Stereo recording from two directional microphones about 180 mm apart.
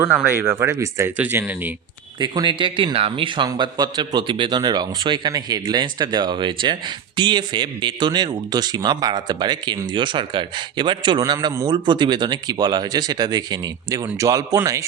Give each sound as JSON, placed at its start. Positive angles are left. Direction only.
{"t": 0.0, "sound": "speech", "side_deg": -10}
{"t": 2.1, "sound": "speech", "side_deg": -25}